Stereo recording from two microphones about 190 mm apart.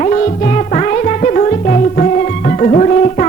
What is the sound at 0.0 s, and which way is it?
Music, 35° left (ahead or behind).